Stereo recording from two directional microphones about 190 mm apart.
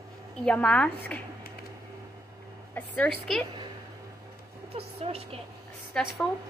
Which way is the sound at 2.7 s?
5° left (ahead or behind).